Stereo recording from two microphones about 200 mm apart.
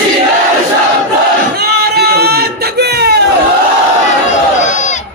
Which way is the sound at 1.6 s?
55° right (ahead or behind).